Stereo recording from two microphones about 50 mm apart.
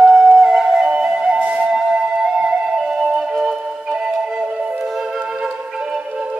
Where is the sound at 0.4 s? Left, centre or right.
Centre.